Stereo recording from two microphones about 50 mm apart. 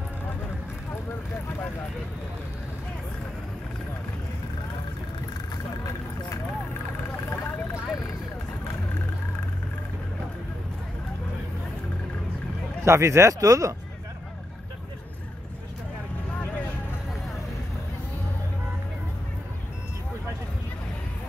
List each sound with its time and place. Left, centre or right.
12.8 s speech: right